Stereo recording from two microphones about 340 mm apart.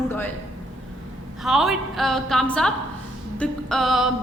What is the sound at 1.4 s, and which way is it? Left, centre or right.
Music, centre.